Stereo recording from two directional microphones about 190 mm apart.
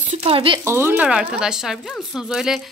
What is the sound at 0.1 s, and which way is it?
Speech, 30° right (ahead or behind).